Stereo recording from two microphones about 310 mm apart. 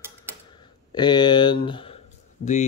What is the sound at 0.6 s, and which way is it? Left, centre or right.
Speech, centre.